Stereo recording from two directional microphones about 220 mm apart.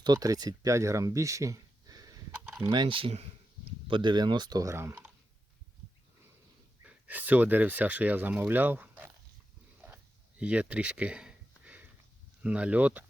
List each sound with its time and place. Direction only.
0.0 s speech: 15° right (ahead or behind)
6.8 s speech: 5° right (ahead or behind)
9.8 s a sound: 5° right (ahead or behind)
12.4 s speech: 5° right (ahead or behind)